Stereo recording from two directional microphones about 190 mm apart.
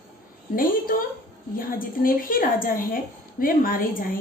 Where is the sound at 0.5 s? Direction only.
50° left (ahead or behind).